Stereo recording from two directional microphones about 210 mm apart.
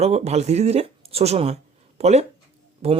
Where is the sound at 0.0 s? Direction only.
30° right (ahead or behind).